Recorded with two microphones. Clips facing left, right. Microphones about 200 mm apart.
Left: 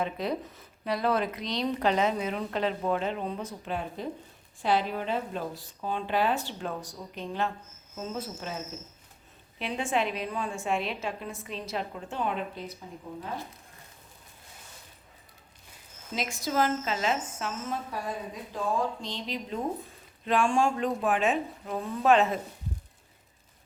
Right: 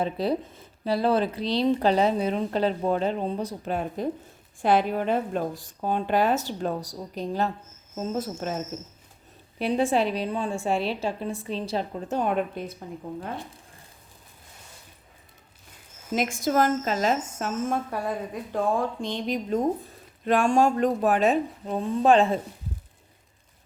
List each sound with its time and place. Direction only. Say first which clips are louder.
0.0 s speech: right 5 dB; 35° right (ahead or behind); by 12.7 s 50° right (ahead or behind)
16.1 s speech: right 5 dB; 50° right (ahead or behind); by 22.4 s 30° right (ahead or behind)